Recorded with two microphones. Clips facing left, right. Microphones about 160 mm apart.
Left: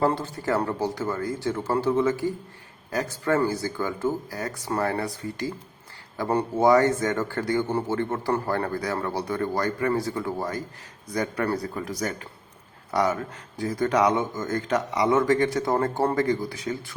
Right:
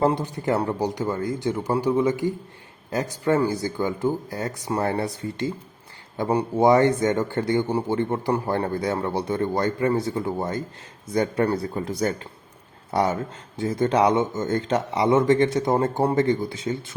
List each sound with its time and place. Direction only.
0.0 s a man's voice: 20° right (ahead or behind)